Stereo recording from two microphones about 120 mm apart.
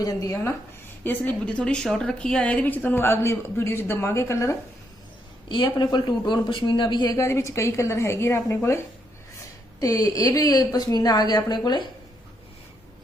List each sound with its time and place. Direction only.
0.0 s a woman's voice: 30° left (ahead or behind)
1.0 s a woman's voice: 15° left (ahead or behind)
5.5 s speech: 40° left (ahead or behind); by 8.8 s 20° left (ahead or behind)
9.8 s a woman's voice: 30° left (ahead or behind)